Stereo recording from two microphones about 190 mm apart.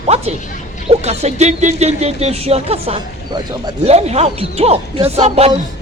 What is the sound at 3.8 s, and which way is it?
Speech, 35° right (ahead or behind).